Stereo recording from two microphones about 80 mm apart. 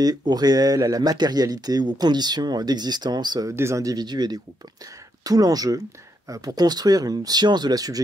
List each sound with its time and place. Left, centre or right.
0.0 s speech: right
3.4 s speech: right
3.9 s speech: right
5.2 s speech: right